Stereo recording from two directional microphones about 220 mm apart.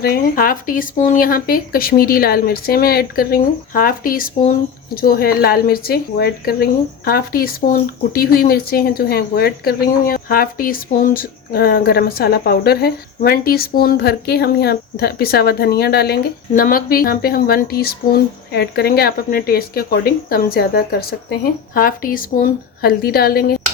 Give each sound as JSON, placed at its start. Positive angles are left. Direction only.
{"t": 0.0, "sound": "speech", "side_deg": 40}